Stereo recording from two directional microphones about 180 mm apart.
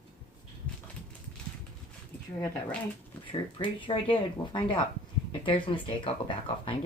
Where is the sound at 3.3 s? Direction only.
30° left (ahead or behind).